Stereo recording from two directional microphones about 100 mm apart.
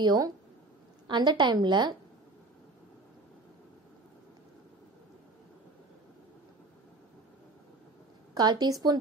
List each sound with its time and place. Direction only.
0.0 s a woman's voice: 50° right (ahead or behind)
8.4 s a woman's voice: 45° right (ahead or behind)